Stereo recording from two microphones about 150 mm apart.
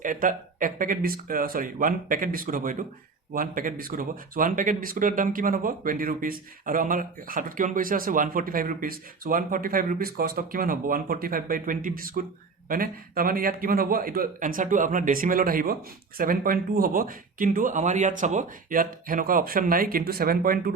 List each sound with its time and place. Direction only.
0.0 s speech: 65° right (ahead or behind)